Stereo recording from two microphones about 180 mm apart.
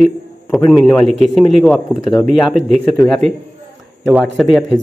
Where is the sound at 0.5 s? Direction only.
Centre (ahead or behind).